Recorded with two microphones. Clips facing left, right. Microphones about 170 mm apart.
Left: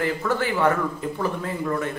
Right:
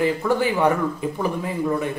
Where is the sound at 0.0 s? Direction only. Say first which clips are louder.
Right 4 dB; 15° right (ahead or behind).